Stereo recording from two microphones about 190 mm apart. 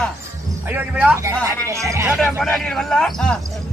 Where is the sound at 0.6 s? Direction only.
10° right (ahead or behind).